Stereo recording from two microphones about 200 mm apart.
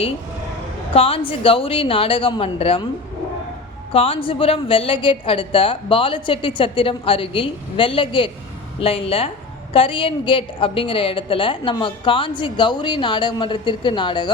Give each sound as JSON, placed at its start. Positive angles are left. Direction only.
{"t": 0.9, "sound": "a woman's voice", "side_deg": 30}
{"t": 3.9, "sound": "a woman's voice", "side_deg": 30}